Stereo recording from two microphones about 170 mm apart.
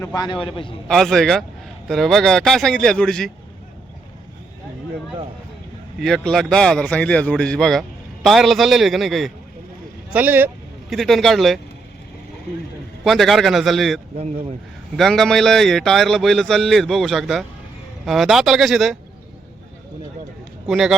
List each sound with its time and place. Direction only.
0.0 s a man's voice: 20° left (ahead or behind)
0.9 s speech: centre (ahead or behind)
6.0 s speech: centre (ahead or behind)
10.1 s speech: 10° right (ahead or behind)
10.8 s speech: centre (ahead or behind)
13.1 s speech: centre (ahead or behind)
20.7 s speech: centre (ahead or behind)